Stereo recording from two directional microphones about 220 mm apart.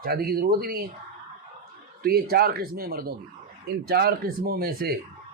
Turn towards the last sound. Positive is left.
turn(degrees=-45)  # may be behind; listen again after turning